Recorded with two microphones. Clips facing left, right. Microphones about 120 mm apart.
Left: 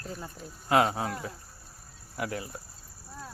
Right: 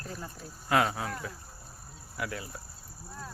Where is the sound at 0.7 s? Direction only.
25° left (ahead or behind).